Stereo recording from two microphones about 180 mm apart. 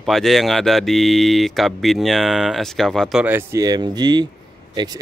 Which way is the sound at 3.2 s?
15° right (ahead or behind).